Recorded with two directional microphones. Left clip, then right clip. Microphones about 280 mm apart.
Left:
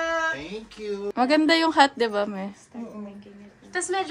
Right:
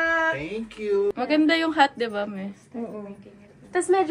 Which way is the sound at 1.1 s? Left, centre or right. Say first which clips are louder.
Left 2 dB; left.